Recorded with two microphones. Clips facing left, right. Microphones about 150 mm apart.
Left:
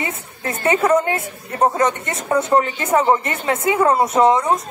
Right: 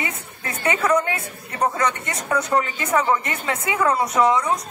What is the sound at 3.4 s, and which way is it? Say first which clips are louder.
Speech: left 5 dB; 25° left (ahead or behind).